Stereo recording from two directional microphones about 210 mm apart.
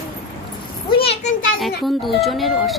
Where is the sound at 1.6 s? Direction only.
Centre (ahead or behind).